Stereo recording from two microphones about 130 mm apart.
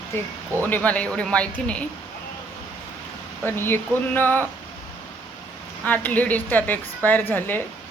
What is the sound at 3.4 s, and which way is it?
A woman's voice, 15° left (ahead or behind).